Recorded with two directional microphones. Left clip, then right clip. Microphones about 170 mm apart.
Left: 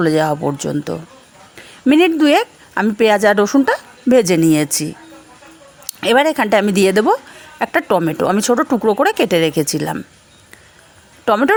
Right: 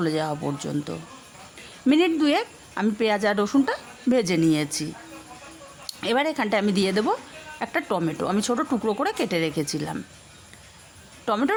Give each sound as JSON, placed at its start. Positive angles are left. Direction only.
{"t": 0.0, "sound": "speech", "side_deg": 45}
{"t": 11.3, "sound": "speech", "side_deg": 40}